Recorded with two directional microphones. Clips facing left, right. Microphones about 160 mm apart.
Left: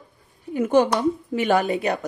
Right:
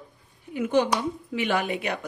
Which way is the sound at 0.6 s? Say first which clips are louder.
Left 4 dB; 45° left (ahead or behind).